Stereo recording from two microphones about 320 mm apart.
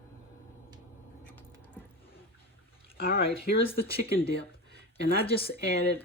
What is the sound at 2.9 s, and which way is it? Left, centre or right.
Speech, left.